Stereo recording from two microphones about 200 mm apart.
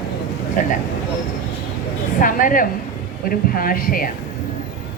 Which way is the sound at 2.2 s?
45° left (ahead or behind).